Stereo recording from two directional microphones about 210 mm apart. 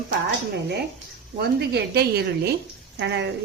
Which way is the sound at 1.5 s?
50° right (ahead or behind).